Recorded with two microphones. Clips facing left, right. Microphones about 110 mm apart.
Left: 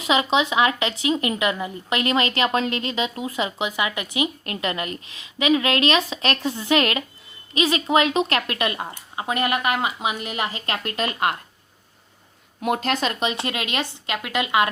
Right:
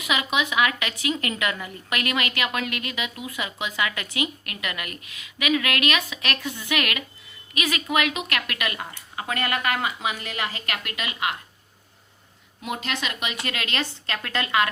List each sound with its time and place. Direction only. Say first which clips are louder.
0.0 s speech: left 5 dB; 30° left (ahead or behind)
12.6 s speech: left 7 dB; 50° left (ahead or behind); by 14.7 s 20° left (ahead or behind)